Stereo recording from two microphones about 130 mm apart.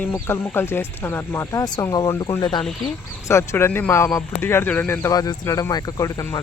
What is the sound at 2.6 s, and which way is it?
Speech, centre (ahead or behind).